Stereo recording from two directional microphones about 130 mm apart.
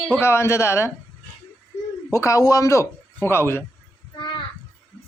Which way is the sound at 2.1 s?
25° left (ahead or behind).